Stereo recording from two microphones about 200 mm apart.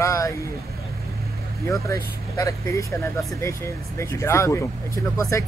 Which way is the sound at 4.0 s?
15° left (ahead or behind).